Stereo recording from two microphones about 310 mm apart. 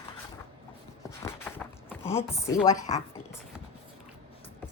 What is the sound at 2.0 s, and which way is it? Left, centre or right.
Speech, centre.